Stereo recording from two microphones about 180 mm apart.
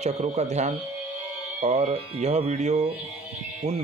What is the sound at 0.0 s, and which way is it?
Speech, 40° right (ahead or behind).